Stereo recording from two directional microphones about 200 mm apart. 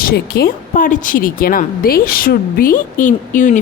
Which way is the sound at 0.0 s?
50° left (ahead or behind).